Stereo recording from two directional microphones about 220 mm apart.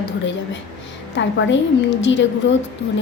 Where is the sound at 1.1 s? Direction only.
55° left (ahead or behind).